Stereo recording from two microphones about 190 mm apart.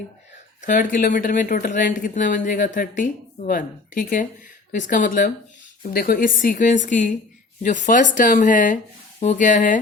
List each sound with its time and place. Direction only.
0.6 s speech: 45° left (ahead or behind)